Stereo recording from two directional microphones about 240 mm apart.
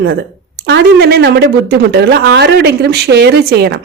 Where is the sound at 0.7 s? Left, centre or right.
Right.